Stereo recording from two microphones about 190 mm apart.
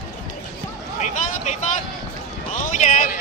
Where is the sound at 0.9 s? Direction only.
35° left (ahead or behind).